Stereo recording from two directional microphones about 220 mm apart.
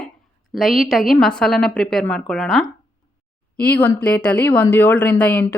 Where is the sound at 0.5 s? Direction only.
Centre (ahead or behind).